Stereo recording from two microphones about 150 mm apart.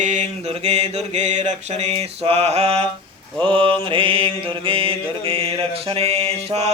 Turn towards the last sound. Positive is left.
turn(degrees=-45)  # may be behind; listen again after turning